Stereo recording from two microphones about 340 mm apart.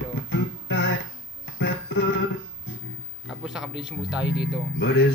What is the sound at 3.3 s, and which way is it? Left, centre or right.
Speech, centre.